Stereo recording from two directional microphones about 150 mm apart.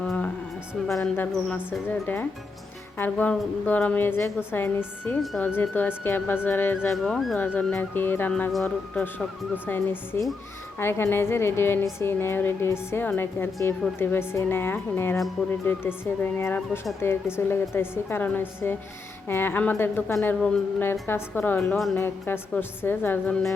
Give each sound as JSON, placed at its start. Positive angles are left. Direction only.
{"t": 0.0, "sound": "a sound", "side_deg": 5}
{"t": 0.7, "sound": "a woman's voice", "side_deg": 0}
{"t": 1.1, "sound": "speech", "side_deg": 10}
{"t": 6.7, "sound": "speech", "side_deg": 0}